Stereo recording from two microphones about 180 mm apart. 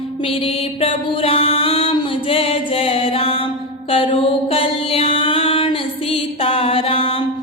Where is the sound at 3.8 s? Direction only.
30° left (ahead or behind).